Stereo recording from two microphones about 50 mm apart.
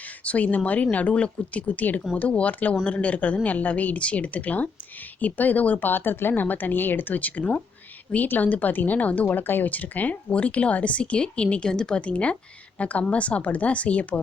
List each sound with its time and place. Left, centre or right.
0.0 s speech: left
10.3 s speech: left